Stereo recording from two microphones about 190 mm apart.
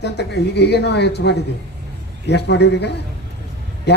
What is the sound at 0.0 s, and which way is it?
A man's voice, 60° left (ahead or behind).